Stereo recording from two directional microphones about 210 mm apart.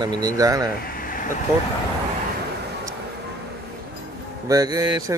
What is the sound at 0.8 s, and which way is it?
Vehicle, 45° left (ahead or behind).